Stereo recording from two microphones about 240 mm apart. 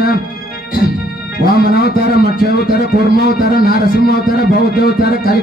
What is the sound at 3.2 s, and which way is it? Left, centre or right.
Music, left.